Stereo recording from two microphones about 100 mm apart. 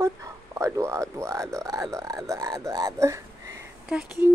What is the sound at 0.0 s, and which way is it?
Speech, 30° right (ahead or behind).